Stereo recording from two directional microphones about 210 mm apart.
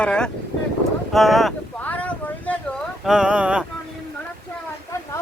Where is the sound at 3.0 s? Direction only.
5° right (ahead or behind).